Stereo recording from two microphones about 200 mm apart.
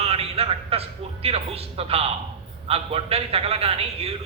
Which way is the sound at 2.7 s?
30° right (ahead or behind).